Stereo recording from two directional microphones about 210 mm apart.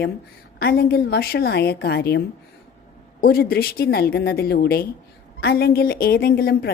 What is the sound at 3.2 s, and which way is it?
Speech, 45° left (ahead or behind).